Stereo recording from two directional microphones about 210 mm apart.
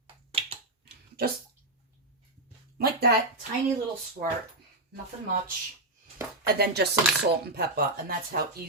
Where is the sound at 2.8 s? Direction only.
45° right (ahead or behind).